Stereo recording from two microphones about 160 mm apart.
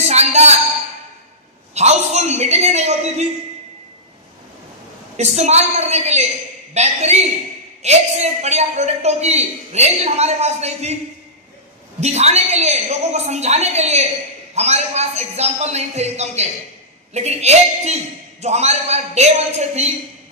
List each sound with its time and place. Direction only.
0.0 s a woman's voice: 45° right (ahead or behind)
1.7 s a man's voice: 45° right (ahead or behind)
5.1 s a man's voice: 45° right (ahead or behind)
12.0 s a man's voice: 45° right (ahead or behind)